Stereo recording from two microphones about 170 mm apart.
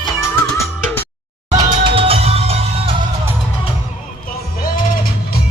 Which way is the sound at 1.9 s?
30° right (ahead or behind).